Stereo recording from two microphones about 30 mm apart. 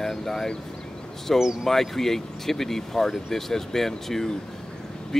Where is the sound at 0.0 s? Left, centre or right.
Centre.